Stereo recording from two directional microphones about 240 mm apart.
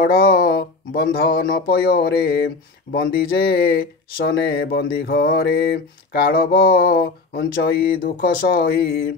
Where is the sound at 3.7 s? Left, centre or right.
Left.